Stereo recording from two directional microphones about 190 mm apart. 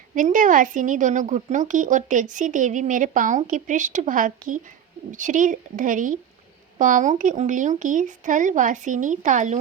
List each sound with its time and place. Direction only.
0.1 s speech: 45° right (ahead or behind)